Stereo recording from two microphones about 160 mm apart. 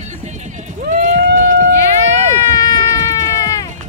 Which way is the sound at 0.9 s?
50° right (ahead or behind).